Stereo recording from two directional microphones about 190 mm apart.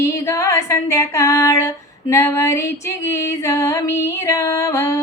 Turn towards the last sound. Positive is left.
turn(degrees=15)  # may be behind; listen again after turning